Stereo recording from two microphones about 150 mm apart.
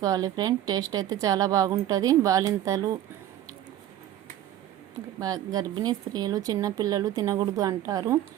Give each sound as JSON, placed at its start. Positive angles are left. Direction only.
{"t": 0.0, "sound": "speech", "side_deg": -25}
{"t": 5.2, "sound": "speech", "side_deg": -25}